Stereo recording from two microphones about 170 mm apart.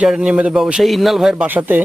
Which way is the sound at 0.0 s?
5° right (ahead or behind).